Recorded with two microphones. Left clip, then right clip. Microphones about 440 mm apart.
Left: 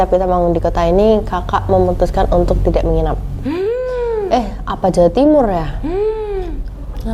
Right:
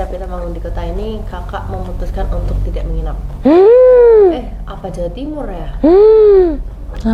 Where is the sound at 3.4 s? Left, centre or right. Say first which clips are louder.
Right 13 dB; right.